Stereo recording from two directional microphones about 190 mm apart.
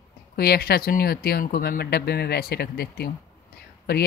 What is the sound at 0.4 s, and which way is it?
Speech, 55° left (ahead or behind).